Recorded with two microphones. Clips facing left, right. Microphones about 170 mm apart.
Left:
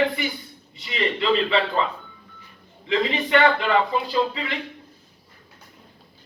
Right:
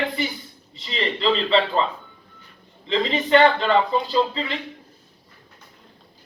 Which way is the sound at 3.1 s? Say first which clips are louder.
Right 5 dB; 30° right (ahead or behind).